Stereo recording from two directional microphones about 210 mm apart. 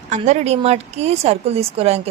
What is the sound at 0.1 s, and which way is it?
Speech, 35° right (ahead or behind).